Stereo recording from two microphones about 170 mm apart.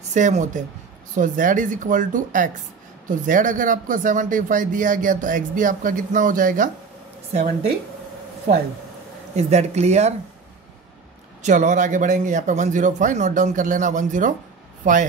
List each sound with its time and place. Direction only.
0.1 s speech: 45° right (ahead or behind)
9.3 s speech: 40° right (ahead or behind)
11.4 s speech: 45° right (ahead or behind)